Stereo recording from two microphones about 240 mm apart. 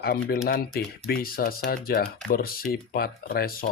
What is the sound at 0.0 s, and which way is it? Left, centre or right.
Speech, left.